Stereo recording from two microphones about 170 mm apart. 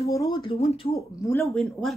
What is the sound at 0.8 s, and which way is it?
Speech, 35° left (ahead or behind).